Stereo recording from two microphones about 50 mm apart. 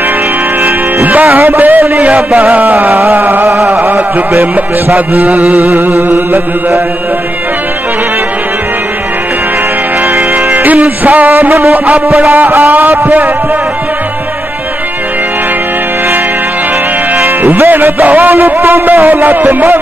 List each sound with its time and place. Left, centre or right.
1.3 s music: right
10.3 s music: right
17.1 s music: right